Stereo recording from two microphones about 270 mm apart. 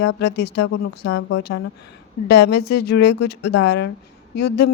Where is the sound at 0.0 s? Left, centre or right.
Left.